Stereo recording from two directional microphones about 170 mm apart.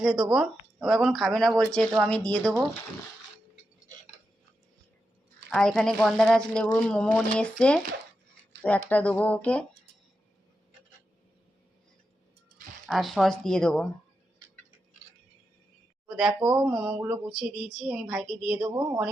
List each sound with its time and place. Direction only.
0.0 s speech: 5° right (ahead or behind)
5.5 s speech: 5° left (ahead or behind)
12.9 s speech: centre (ahead or behind)
16.0 s speech: 5° right (ahead or behind)
18.6 s a woman's voice: 20° right (ahead or behind)